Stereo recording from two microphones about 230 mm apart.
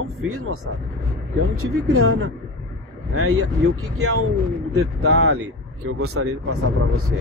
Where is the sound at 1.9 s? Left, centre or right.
Right.